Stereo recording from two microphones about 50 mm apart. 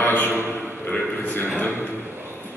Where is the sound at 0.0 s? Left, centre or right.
Left.